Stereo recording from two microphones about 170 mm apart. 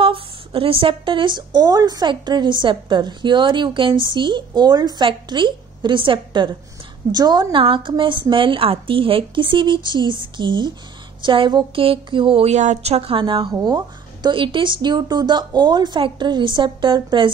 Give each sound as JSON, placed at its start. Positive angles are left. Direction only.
{"t": 0.0, "sound": "a woman's voice", "side_deg": -30}